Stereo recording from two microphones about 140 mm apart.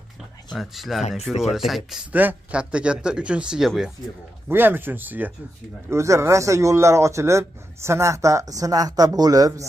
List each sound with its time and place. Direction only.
0.5 s speech: centre (ahead or behind)
4.5 s speech: 15° right (ahead or behind)